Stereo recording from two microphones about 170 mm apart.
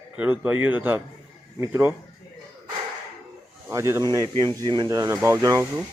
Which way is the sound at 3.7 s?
20° right (ahead or behind).